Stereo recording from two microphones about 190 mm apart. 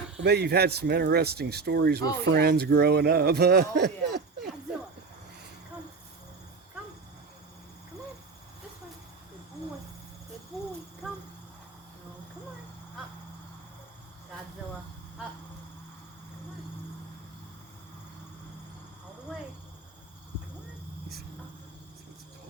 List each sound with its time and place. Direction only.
0.2 s speech: 60° right (ahead or behind)